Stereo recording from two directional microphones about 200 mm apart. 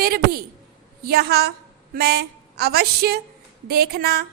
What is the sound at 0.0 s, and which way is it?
A woman's voice, 50° right (ahead or behind).